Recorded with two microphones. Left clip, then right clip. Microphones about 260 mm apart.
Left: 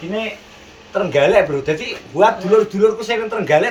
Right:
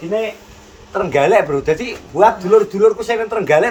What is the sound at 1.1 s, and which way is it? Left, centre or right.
A man's voice, right.